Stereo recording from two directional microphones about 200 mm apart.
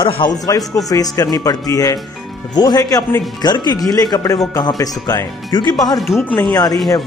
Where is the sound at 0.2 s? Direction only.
20° left (ahead or behind).